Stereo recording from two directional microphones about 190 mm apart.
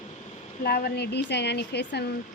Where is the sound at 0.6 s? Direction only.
55° left (ahead or behind).